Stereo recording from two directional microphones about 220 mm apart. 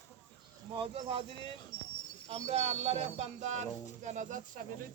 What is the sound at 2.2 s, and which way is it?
Speech, 30° right (ahead or behind).